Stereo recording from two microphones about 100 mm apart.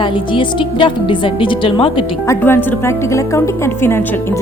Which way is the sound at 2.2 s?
25° left (ahead or behind).